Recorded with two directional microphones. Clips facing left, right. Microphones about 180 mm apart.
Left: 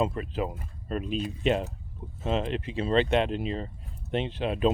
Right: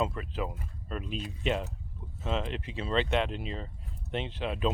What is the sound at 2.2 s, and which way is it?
Speech, 50° left (ahead or behind).